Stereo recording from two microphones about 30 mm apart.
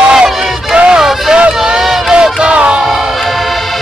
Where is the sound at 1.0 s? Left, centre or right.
Centre.